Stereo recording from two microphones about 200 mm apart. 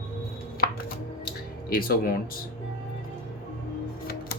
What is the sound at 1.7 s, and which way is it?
Speech, 45° left (ahead or behind).